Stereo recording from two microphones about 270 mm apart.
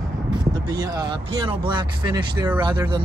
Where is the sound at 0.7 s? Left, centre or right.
Centre.